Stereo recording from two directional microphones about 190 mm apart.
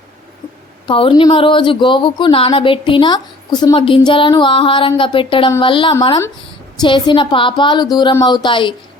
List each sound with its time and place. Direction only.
0.9 s speech: 25° left (ahead or behind)